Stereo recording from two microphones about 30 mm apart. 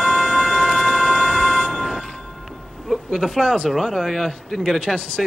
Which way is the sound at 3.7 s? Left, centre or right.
Centre.